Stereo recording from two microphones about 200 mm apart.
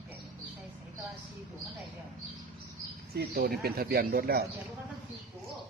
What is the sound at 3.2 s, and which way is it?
Speech, 50° right (ahead or behind).